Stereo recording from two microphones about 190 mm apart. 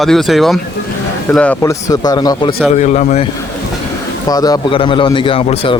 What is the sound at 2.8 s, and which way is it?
Speech, 35° left (ahead or behind).